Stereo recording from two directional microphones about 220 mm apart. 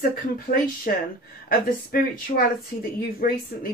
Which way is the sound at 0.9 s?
40° left (ahead or behind).